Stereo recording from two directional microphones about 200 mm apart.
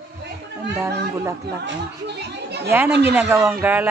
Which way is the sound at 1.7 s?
55° right (ahead or behind).